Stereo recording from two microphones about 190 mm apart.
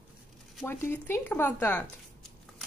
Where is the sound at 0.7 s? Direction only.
10° left (ahead or behind).